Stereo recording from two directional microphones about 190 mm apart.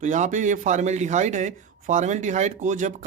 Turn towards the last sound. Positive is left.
turn(degrees=-40)  # may be behind; listen again after turning